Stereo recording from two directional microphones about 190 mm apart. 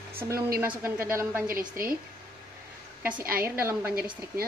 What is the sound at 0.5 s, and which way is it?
Speech, 10° right (ahead or behind).